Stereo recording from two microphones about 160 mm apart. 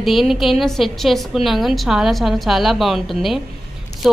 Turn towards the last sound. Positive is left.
turn(degrees=0)  # may be behind; listen again after turning